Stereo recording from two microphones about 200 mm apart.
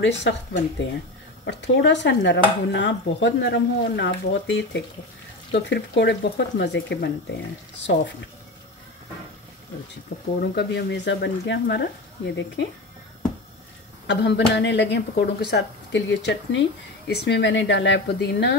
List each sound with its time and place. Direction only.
0.0 s speech: 65° left (ahead or behind)
10.1 s speech: 60° left (ahead or behind)
14.0 s speech: 60° left (ahead or behind)